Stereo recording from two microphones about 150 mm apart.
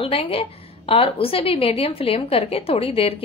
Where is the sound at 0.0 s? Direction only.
40° left (ahead or behind).